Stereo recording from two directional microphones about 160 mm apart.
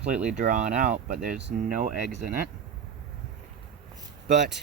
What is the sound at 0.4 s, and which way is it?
Speech, 55° right (ahead or behind).